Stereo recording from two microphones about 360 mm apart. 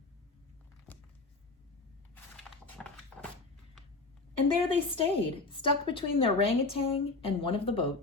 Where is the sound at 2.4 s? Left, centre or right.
Centre.